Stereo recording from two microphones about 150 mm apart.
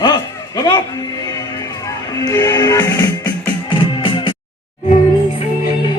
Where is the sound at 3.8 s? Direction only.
35° left (ahead or behind).